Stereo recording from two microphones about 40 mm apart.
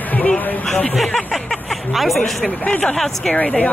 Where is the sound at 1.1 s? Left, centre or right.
Centre.